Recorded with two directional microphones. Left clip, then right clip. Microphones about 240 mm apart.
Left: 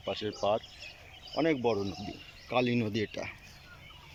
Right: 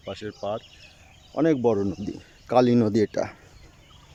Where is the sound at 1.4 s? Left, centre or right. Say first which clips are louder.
Right 7 dB; centre.